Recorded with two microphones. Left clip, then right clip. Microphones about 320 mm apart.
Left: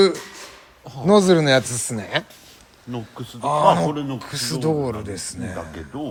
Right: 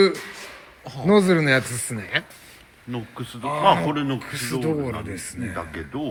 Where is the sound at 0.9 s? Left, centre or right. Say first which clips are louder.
Left 3 dB; centre.